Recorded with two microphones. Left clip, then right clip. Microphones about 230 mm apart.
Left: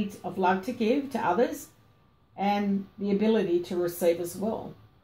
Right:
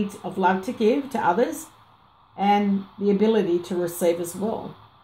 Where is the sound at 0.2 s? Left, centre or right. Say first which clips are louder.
Right 4 dB; right.